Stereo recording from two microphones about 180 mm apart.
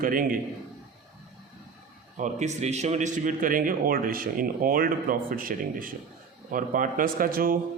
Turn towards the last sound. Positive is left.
turn(degrees=-55)  # may be behind; listen again after turning